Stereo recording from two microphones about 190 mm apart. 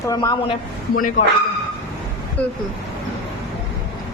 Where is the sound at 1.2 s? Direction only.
40° left (ahead or behind).